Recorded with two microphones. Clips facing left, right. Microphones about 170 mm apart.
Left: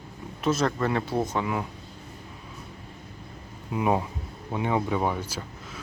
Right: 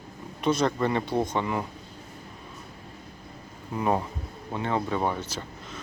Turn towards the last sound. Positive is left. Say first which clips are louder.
# even
turn(degrees=10)  # may be behind; listen again after turning